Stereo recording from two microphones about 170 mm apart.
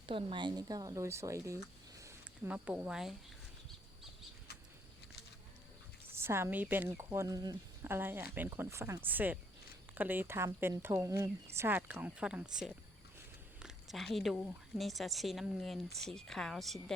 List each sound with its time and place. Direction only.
0.0 s speech: 30° right (ahead or behind)
2.5 s a woman's voice: 5° right (ahead or behind)
6.1 s a woman's voice: 15° right (ahead or behind); by 16.9 s centre (ahead or behind)